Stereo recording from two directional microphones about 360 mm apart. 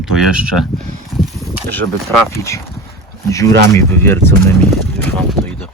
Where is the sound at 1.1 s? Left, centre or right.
Centre.